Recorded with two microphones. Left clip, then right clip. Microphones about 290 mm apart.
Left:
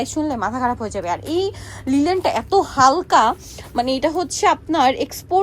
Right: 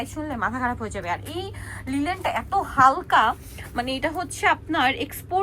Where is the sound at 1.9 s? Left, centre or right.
Left.